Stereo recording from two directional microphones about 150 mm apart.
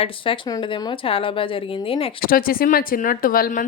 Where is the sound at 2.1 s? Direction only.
70° left (ahead or behind).